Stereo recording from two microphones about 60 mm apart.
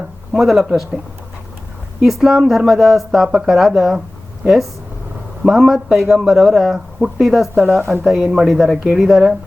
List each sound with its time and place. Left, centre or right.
0.3 s speech: centre
2.0 s speech: centre
7.8 s speech: right
8.0 s speech: centre